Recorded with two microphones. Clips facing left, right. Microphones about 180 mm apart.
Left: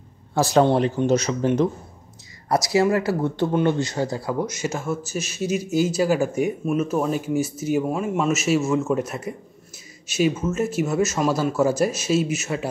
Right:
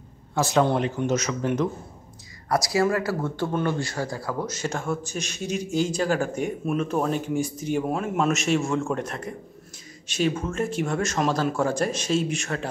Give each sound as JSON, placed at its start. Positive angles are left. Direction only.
{"t": 0.3, "sound": "a man's voice", "side_deg": 35}